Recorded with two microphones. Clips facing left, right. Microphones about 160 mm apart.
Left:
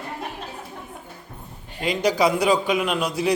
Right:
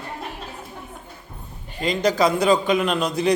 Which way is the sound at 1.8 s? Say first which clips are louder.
Right 1 dB; 10° left (ahead or behind).